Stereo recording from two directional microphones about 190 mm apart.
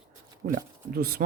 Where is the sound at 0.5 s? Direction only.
50° right (ahead or behind).